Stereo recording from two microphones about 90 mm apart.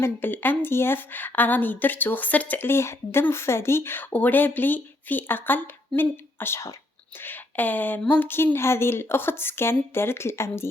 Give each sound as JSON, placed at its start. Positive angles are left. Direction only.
{"t": 0.0, "sound": "a woman's voice", "side_deg": 20}